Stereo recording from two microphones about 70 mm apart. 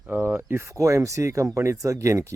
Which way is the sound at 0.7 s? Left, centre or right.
Right.